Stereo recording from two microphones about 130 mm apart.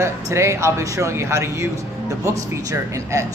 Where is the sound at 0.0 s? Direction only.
20° right (ahead or behind).